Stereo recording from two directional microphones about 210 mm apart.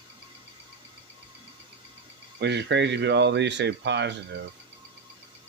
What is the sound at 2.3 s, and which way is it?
Speech, 55° right (ahead or behind).